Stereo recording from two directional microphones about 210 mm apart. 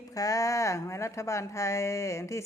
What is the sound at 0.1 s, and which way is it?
A woman's voice, 15° left (ahead or behind).